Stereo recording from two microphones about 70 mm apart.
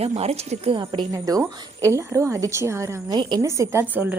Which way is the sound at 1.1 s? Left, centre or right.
Right.